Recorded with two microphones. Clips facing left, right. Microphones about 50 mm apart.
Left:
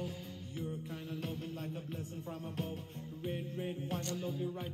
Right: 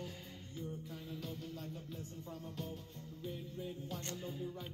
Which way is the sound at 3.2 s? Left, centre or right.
Left.